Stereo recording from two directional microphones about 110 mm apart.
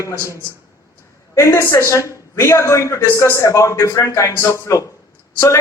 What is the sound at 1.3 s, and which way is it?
A man's voice, 25° left (ahead or behind).